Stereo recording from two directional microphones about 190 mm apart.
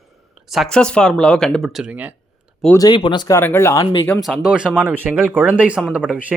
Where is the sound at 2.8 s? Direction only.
25° left (ahead or behind).